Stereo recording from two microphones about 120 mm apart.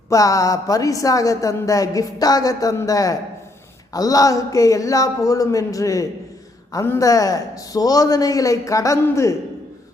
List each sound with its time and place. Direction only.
0.1 s a woman's voice: 30° left (ahead or behind)